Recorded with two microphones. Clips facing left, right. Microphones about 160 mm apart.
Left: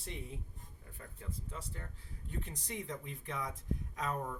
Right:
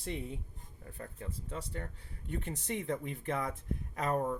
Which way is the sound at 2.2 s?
70° right (ahead or behind).